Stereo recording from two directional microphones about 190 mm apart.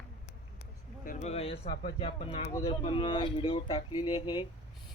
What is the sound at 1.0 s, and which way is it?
Speech, 40° left (ahead or behind).